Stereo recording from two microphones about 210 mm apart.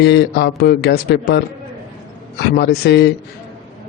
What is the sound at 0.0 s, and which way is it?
A man's voice, 55° left (ahead or behind).